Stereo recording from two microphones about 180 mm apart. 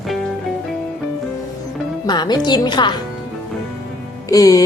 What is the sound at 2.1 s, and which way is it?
Speech, 25° left (ahead or behind).